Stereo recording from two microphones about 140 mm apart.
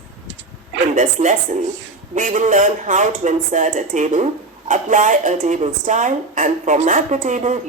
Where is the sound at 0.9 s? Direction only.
65° right (ahead or behind).